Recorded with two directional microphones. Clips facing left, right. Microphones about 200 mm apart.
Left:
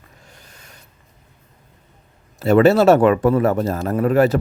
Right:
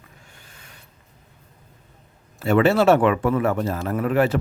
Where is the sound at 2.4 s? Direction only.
40° left (ahead or behind).